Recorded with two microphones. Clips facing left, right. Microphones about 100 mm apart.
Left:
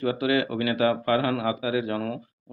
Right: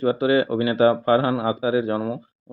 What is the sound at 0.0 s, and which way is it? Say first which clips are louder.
Speech: right 5 dB; 30° right (ahead or behind).